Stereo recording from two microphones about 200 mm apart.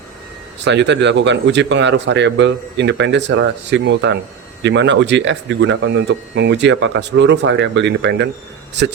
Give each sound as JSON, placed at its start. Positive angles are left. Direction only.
{"t": 0.6, "sound": "speech", "side_deg": -60}